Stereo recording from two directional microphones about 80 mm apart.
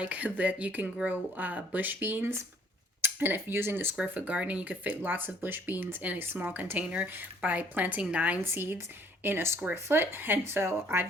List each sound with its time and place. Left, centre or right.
0.0 s speech: centre
3.9 s speech: centre